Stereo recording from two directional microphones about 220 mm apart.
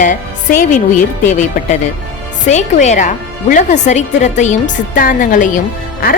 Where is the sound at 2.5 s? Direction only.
30° left (ahead or behind).